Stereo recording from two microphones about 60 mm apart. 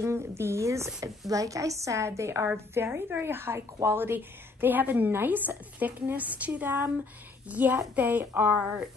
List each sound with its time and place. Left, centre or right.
0.0 s a woman's voice: right
1.3 s a woman's voice: right